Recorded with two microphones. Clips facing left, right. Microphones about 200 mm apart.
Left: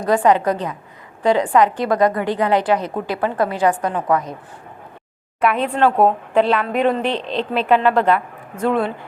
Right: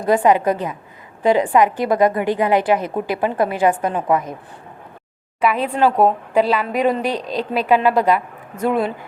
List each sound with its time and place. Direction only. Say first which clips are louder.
0.0 s a woman's voice: right 1 dB; 20° right (ahead or behind)
5.4 s a woman's voice: even; 5° right (ahead or behind)